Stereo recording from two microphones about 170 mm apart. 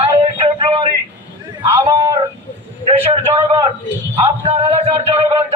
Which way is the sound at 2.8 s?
35° right (ahead or behind).